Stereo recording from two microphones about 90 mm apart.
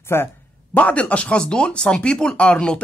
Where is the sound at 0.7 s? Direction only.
15° left (ahead or behind).